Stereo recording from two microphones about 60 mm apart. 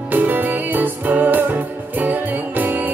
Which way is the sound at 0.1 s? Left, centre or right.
Right.